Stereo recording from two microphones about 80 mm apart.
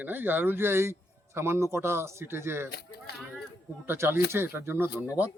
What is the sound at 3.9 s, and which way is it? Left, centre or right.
Speech, right.